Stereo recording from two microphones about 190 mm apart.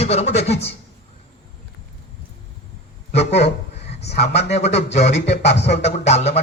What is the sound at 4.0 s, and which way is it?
Speech, 60° left (ahead or behind).